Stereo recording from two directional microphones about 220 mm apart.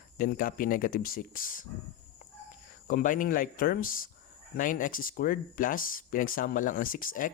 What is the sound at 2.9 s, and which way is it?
Speech, 35° left (ahead or behind).